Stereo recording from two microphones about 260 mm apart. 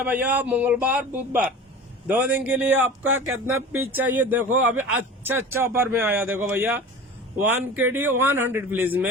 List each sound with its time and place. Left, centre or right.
0.0 s a man's voice: centre